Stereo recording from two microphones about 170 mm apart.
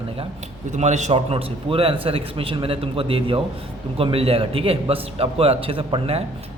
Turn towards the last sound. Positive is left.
turn(degrees=-35)  # may be behind; listen again after turning